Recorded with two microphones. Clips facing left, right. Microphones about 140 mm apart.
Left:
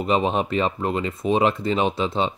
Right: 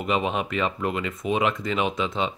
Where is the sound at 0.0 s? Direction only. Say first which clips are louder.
Left 4 dB; 35° left (ahead or behind).